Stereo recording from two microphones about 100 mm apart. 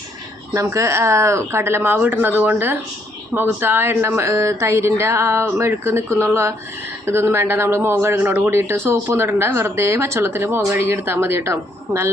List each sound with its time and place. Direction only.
0.5 s speech: 30° right (ahead or behind)